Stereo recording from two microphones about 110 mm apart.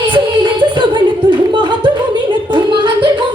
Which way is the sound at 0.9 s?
45° right (ahead or behind).